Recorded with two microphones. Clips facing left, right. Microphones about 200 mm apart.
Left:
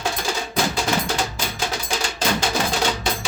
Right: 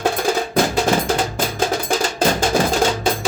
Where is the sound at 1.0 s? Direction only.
50° right (ahead or behind).